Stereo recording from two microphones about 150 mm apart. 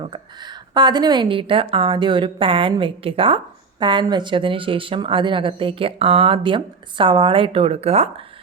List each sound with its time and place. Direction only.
0.7 s a woman's voice: 30° right (ahead or behind); by 8.1 s 45° right (ahead or behind)